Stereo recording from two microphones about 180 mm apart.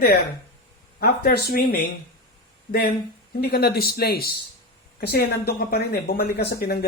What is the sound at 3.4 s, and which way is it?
Speech, 60° left (ahead or behind).